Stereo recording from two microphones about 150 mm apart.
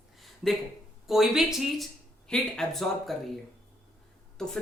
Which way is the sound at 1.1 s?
Centre (ahead or behind).